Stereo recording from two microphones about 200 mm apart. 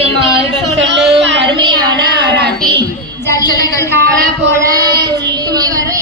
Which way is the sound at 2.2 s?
55° right (ahead or behind).